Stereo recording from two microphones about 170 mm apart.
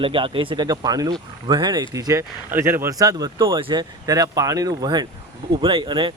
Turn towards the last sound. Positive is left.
turn(degrees=-30)  # may be behind; listen again after turning